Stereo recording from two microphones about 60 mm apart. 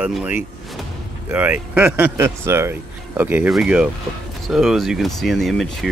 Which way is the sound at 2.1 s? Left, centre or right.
Right.